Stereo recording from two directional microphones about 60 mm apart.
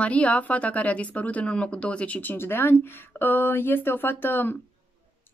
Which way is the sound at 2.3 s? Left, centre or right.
Left.